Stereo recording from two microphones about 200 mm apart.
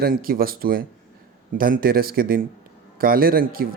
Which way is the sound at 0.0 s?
45° right (ahead or behind).